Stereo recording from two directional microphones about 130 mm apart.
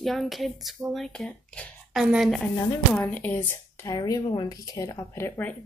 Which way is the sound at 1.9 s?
Centre (ahead or behind).